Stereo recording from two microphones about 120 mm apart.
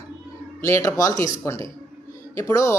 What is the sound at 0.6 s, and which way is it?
Speech, 25° left (ahead or behind).